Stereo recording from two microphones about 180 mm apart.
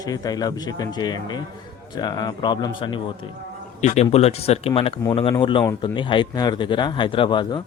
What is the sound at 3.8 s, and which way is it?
A man's voice, 40° left (ahead or behind).